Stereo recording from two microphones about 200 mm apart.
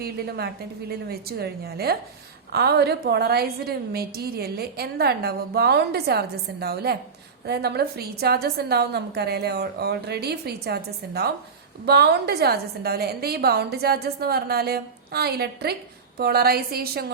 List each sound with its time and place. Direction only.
0.0 s a woman's voice: 50° right (ahead or behind)